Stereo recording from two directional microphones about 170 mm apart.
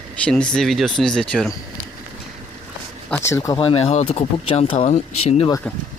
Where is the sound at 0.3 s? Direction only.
5° left (ahead or behind).